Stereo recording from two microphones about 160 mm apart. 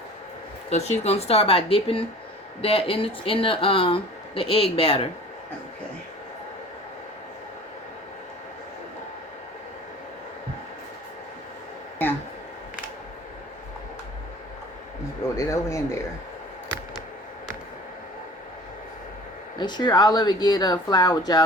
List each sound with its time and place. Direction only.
0.7 s speech: 45° left (ahead or behind)
15.4 s a sound: 20° left (ahead or behind)
19.5 s speech: 25° left (ahead or behind)